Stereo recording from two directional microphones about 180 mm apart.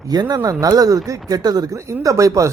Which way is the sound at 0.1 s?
20° right (ahead or behind).